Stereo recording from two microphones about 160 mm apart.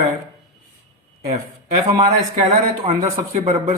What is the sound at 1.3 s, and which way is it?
Speech, 45° right (ahead or behind).